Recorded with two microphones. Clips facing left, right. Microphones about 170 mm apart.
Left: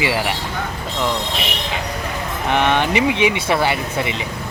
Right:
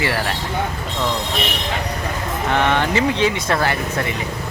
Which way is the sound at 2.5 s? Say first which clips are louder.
Left 1 dB; 20° left (ahead or behind).